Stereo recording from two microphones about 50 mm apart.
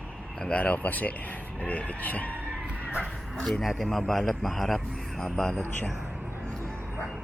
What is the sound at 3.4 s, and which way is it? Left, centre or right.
A man's voice, centre.